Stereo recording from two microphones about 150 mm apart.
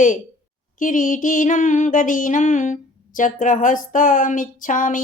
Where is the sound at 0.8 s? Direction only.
60° left (ahead or behind).